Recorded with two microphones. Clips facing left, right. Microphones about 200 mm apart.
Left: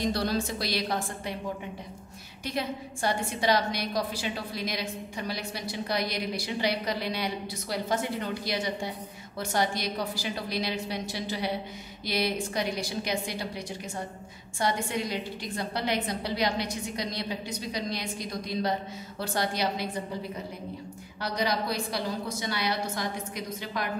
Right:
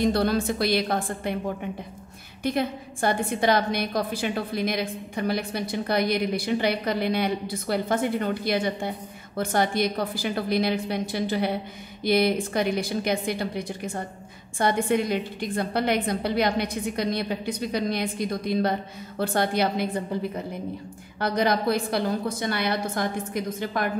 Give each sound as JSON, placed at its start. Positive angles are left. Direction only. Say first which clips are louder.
{"t": 0.0, "sound": "a woman's voice", "louder": "right 6 dB", "side_deg": -55}
{"t": 2.4, "sound": "a woman's voice", "louder": "right 6 dB", "side_deg": -55}
{"t": 21.2, "sound": "a woman's voice", "louder": "right 6 dB", "side_deg": -55}